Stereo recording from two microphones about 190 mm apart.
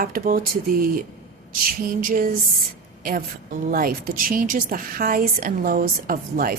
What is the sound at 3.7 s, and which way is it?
A woman's voice, 50° right (ahead or behind).